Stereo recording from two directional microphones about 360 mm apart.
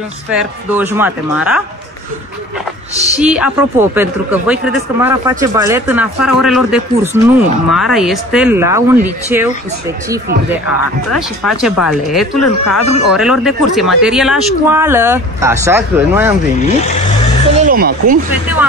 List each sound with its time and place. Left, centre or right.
0.3 s speech: centre
3.2 s speech: centre
12.4 s speech: left
13.1 s speech: centre
17.6 s speech: right